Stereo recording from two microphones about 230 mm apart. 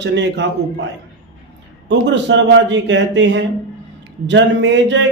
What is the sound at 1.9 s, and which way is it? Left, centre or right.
Speech, right.